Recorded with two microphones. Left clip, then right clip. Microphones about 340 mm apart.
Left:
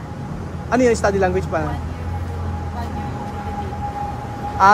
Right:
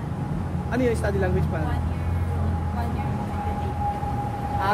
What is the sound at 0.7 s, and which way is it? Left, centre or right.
Speech, centre.